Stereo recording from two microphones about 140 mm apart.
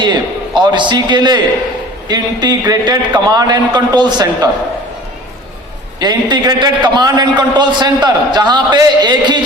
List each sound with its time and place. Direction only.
0.0 s a man's voice: 35° right (ahead or behind)
6.0 s a man's voice: 30° right (ahead or behind)